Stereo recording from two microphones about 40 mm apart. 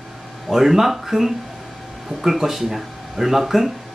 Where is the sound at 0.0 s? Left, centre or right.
Centre.